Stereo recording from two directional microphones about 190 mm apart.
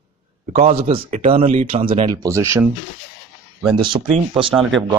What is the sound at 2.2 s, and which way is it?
Speech, 15° right (ahead or behind).